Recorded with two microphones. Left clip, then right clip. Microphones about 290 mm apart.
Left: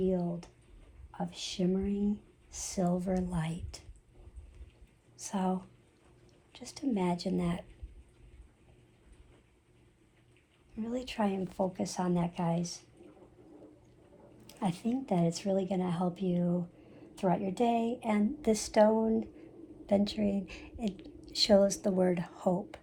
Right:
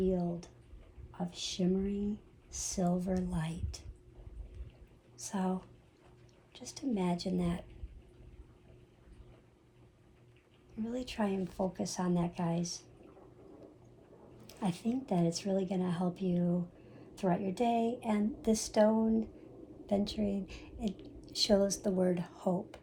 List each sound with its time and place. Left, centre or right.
0.0 s a sound: left
1.1 s a woman's voice: left
5.1 s a woman's voice: left
10.8 s a woman's voice: left
14.4 s a woman's voice: left